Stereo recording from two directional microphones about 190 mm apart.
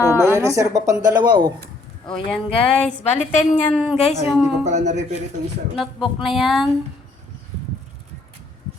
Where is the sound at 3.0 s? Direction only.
40° left (ahead or behind).